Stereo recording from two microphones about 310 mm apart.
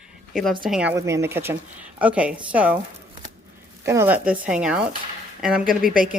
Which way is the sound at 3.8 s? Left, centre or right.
Centre.